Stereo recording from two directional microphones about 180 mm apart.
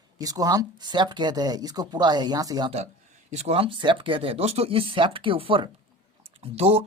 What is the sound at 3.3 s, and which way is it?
Speech, 35° right (ahead or behind).